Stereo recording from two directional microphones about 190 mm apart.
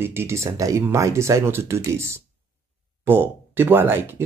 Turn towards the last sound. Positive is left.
turn(degrees=-10)  # may be behind; listen again after turning